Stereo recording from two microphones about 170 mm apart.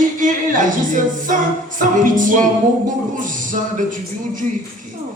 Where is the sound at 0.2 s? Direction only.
50° right (ahead or behind).